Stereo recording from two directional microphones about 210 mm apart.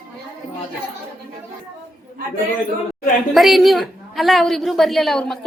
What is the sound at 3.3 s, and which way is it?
A woman's voice, centre (ahead or behind).